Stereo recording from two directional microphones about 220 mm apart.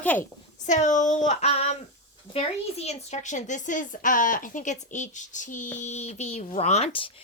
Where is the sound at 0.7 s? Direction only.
35° left (ahead or behind).